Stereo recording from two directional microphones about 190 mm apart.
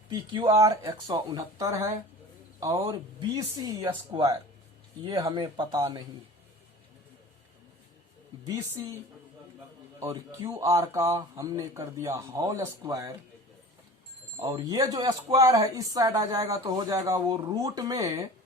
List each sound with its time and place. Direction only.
0.1 s speech: 20° right (ahead or behind)
10.0 s a man's voice: 15° right (ahead or behind)
14.3 s a man's voice: 20° right (ahead or behind)